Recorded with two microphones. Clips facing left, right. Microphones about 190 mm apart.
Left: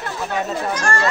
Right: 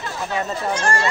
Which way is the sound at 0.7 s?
20° right (ahead or behind).